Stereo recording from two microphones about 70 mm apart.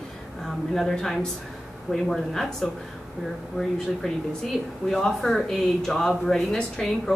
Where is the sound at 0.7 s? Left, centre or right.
Centre.